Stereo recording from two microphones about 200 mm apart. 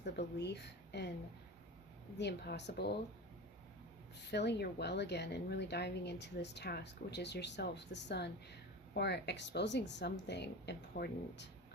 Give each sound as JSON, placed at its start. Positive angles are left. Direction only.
{"t": 0.0, "sound": "speech", "side_deg": 55}
{"t": 2.1, "sound": "speech", "side_deg": 55}
{"t": 4.2, "sound": "speech", "side_deg": 60}